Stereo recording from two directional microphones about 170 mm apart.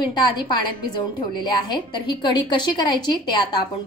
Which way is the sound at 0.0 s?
25° left (ahead or behind).